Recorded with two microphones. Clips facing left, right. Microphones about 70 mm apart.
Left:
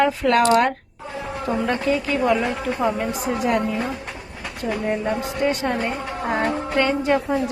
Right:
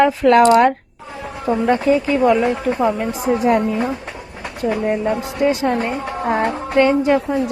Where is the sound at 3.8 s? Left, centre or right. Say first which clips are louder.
Right 5 dB; right.